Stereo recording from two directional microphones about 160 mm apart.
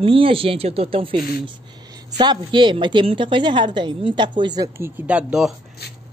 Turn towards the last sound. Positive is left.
turn(degrees=-5)  # may be behind; listen again after turning